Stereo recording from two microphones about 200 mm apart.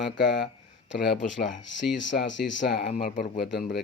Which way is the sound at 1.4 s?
65° left (ahead or behind).